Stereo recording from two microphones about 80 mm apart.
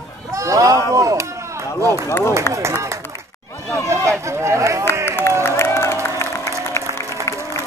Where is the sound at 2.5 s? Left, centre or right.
Right.